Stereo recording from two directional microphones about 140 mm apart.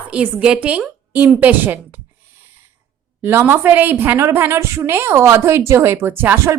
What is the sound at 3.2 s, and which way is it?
A woman's voice, 20° right (ahead or behind).